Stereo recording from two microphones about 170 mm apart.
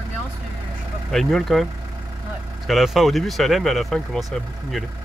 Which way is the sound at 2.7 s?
Centre (ahead or behind).